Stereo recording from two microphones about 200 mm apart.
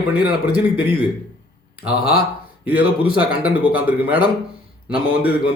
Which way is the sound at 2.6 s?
10° right (ahead or behind).